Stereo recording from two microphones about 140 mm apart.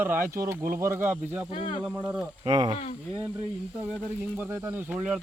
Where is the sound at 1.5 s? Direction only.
40° left (ahead or behind).